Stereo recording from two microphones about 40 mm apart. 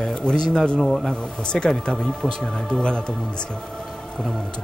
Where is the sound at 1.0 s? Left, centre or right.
Centre.